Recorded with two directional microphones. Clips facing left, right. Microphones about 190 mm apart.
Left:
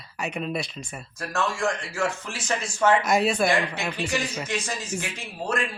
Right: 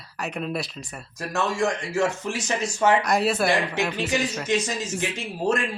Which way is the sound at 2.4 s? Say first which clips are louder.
Even; 20° right (ahead or behind).